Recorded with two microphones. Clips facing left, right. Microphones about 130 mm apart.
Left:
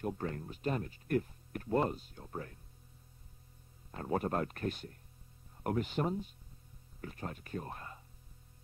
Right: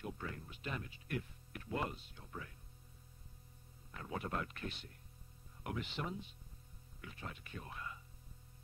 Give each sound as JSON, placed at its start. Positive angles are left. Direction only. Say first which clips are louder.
{"t": 0.0, "sound": "speech", "louder": "left 8 dB", "side_deg": 45}
{"t": 4.0, "sound": "speech", "louder": "left 8 dB", "side_deg": 45}